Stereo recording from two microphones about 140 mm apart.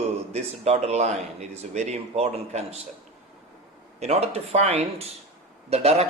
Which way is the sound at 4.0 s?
50° right (ahead or behind).